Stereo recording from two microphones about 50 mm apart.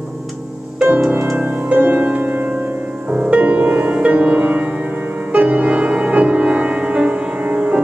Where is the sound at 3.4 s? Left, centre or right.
Right.